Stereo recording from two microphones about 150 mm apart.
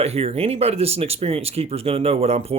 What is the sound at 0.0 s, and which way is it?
Speech, 45° right (ahead or behind).